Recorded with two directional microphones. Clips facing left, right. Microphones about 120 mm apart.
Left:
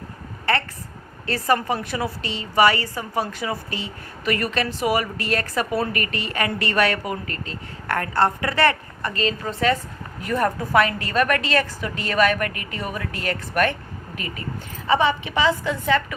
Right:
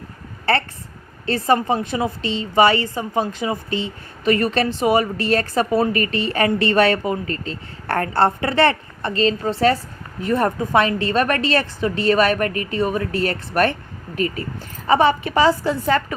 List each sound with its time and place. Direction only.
0.5 s a woman's voice: 30° right (ahead or behind)
14.8 s a woman's voice: 45° right (ahead or behind)